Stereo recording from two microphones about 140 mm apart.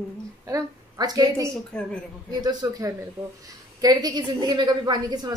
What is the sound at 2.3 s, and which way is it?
A woman's voice, 30° right (ahead or behind).